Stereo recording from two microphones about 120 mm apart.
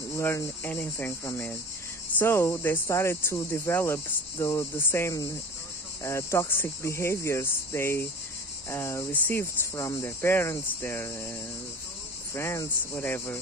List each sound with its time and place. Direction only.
0.1 s speech: 20° left (ahead or behind)
12.4 s speech: 20° left (ahead or behind)